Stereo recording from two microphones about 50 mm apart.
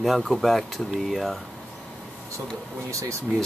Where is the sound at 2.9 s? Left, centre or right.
Right.